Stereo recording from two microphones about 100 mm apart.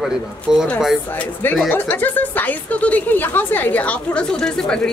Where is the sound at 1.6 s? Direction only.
20° left (ahead or behind).